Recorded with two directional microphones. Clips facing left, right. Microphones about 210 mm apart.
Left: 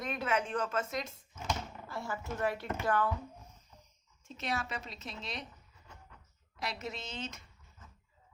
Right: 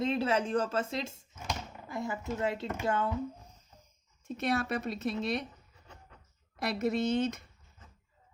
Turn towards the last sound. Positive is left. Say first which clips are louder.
# right 14 dB
turn(degrees=-60)  # may be behind; listen again after turning